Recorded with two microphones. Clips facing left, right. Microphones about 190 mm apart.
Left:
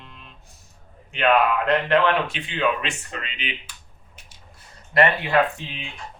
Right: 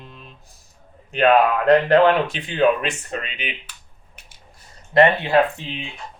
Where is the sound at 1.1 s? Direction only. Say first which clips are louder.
Right 4 dB; 40° right (ahead or behind).